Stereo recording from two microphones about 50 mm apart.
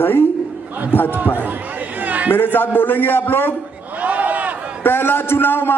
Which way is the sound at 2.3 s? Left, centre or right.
Left.